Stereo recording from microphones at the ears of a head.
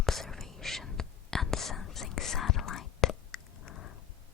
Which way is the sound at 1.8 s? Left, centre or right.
Left.